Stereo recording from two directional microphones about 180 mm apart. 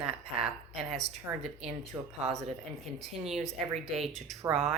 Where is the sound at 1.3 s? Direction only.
15° right (ahead or behind).